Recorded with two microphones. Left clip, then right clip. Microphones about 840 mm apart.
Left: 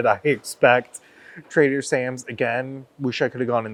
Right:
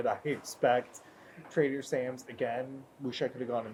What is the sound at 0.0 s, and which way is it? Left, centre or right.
Speech, left.